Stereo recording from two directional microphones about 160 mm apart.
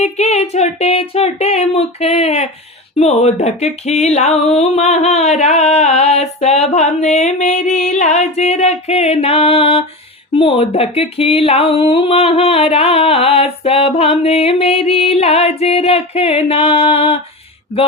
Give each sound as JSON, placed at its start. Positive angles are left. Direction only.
{"t": 0.0, "sound": "speech", "side_deg": 45}
{"t": 2.9, "sound": "a sound", "side_deg": 40}
{"t": 10.3, "sound": "speech", "side_deg": 35}